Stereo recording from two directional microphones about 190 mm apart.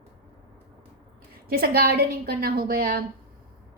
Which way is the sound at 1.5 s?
50° right (ahead or behind).